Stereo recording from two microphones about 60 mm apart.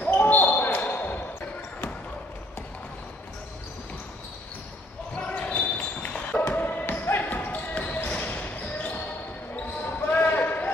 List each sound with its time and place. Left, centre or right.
0.1 s basketball bounce: left
5.1 s basketball bounce: centre